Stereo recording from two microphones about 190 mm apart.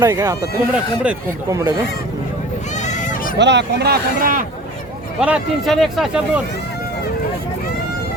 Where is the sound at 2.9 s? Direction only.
40° left (ahead or behind).